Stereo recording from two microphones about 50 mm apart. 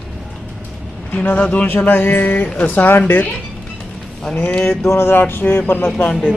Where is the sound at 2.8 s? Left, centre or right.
Left.